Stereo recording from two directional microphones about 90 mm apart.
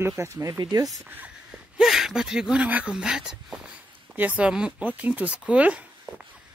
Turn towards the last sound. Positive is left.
turn(degrees=-15)  # may be behind; listen again after turning